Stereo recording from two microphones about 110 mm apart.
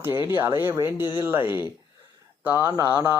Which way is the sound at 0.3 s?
20° right (ahead or behind).